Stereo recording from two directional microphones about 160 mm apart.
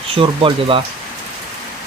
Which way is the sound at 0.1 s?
35° right (ahead or behind).